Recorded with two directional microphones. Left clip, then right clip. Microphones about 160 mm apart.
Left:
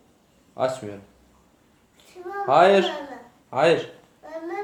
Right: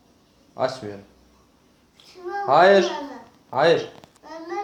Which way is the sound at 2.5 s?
10° left (ahead or behind).